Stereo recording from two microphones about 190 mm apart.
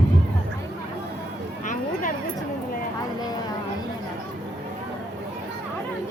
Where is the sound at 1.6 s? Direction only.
45° left (ahead or behind).